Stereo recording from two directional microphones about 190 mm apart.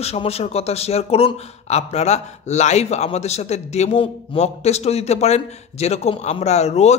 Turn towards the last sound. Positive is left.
turn(degrees=35)  # may be behind; listen again after turning